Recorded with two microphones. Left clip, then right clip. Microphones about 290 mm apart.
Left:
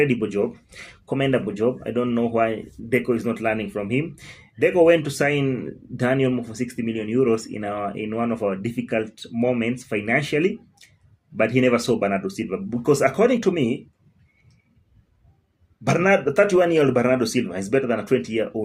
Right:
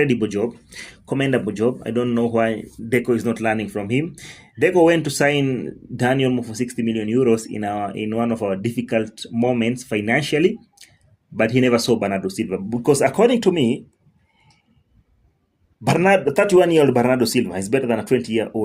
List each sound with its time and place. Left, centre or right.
0.0 s speech: right
15.8 s speech: right